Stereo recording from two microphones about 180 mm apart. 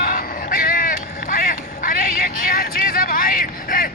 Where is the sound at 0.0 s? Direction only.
55° left (ahead or behind).